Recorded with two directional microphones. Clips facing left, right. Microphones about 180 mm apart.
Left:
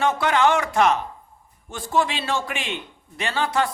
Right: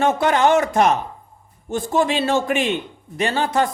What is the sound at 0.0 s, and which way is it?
Speech, 45° right (ahead or behind).